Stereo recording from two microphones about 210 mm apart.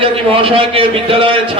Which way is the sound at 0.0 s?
25° right (ahead or behind).